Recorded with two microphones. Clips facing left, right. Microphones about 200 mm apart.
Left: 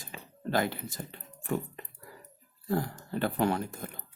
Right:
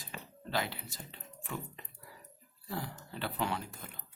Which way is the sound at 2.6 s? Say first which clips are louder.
Left 9 dB; 50° left (ahead or behind).